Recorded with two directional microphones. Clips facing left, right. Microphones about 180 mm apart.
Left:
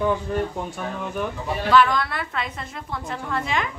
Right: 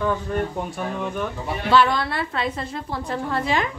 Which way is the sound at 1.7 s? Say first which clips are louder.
Even; 30° right (ahead or behind).